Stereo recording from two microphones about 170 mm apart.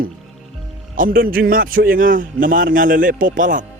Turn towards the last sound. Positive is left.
turn(degrees=-50)  # may be behind; listen again after turning